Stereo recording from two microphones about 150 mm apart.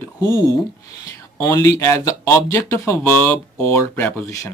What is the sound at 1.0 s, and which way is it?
Speech, 20° left (ahead or behind).